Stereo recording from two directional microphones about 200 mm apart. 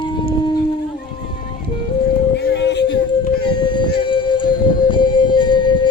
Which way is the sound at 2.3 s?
60° left (ahead or behind).